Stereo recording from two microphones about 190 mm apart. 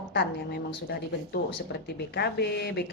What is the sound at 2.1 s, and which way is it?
Speech, 60° left (ahead or behind).